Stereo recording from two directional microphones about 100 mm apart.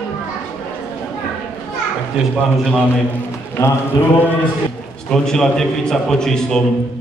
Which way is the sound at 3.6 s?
30° left (ahead or behind).